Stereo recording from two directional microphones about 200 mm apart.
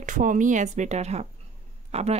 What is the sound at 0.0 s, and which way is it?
A woman's voice, 40° right (ahead or behind).